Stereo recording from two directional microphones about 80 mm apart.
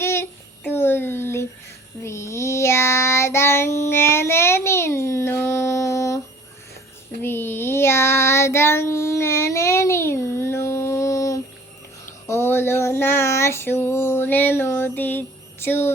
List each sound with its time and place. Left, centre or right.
0.0 s child singing: left
7.2 s child singing: left
12.3 s a sound: left